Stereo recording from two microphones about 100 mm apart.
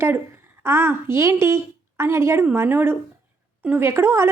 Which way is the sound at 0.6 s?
25° right (ahead or behind).